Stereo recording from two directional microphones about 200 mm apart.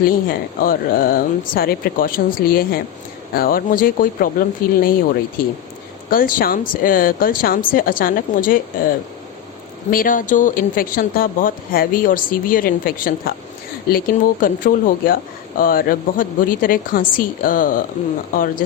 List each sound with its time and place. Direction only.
0.0 s speech: 45° left (ahead or behind)
9.9 s speech: 45° left (ahead or behind)
14.4 s speech: 45° left (ahead or behind)